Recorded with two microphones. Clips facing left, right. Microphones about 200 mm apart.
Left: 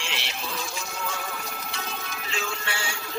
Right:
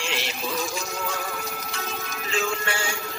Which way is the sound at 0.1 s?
40° right (ahead or behind).